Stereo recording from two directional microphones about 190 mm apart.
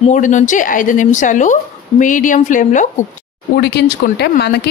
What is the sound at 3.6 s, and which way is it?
Speech, 60° left (ahead or behind).